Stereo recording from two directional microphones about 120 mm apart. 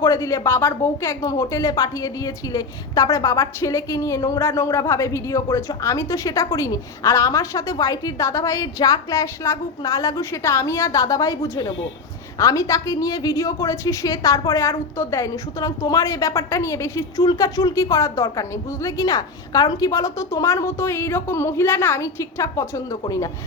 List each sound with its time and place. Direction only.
0.0 s speech: 25° left (ahead or behind)